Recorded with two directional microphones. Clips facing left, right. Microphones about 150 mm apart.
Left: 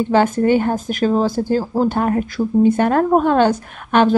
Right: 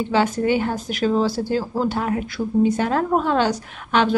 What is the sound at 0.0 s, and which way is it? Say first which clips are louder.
Speech: left 5 dB; 50° left (ahead or behind).